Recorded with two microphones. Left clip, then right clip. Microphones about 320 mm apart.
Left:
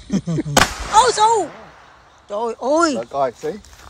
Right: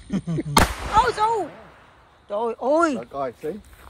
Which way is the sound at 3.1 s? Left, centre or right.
Left.